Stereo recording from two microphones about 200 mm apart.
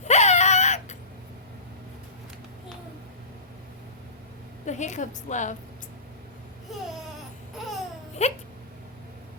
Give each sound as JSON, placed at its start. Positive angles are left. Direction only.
{"t": 0.0, "sound": "a sound", "side_deg": 35}
{"t": 4.6, "sound": "a woman's voice", "side_deg": 35}
{"t": 8.2, "sound": "speech", "side_deg": 35}